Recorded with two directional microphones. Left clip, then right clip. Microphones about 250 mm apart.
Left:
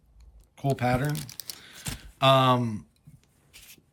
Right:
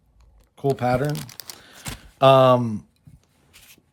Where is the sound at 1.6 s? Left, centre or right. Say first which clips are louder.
Right 1 dB; centre.